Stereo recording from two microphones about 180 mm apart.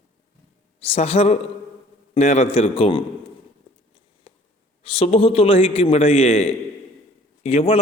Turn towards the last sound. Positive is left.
turn(degrees=35)  # may be behind; listen again after turning